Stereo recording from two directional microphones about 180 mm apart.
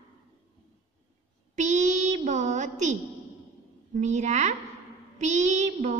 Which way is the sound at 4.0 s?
40° right (ahead or behind).